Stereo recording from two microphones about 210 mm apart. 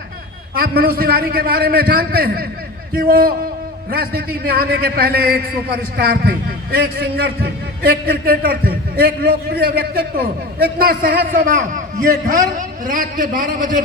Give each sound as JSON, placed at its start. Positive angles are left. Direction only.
{"t": 0.6, "sound": "a man's voice", "side_deg": -45}